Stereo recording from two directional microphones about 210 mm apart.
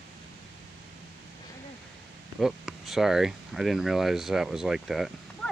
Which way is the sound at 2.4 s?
Centre (ahead or behind).